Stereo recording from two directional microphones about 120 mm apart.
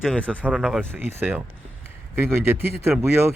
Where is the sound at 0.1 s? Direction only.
10° left (ahead or behind).